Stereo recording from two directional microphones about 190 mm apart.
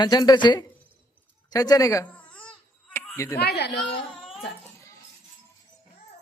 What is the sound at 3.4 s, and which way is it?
Speech, 60° left (ahead or behind).